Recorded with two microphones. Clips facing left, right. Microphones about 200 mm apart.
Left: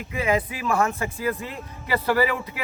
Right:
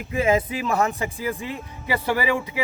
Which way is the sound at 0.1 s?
25° right (ahead or behind).